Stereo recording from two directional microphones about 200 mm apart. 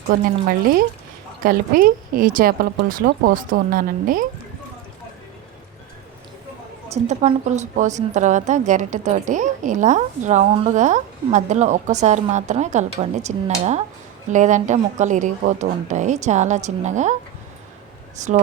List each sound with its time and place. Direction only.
0.1 s speech: 45° right (ahead or behind)
6.9 s a woman's voice: 35° right (ahead or behind)
18.2 s a woman's voice: 35° right (ahead or behind)